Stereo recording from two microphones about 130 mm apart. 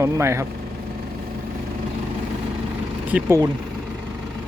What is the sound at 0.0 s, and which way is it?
Speech, 20° right (ahead or behind).